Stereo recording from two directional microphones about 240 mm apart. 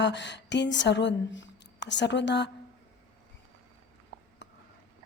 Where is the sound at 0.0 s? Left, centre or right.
Left.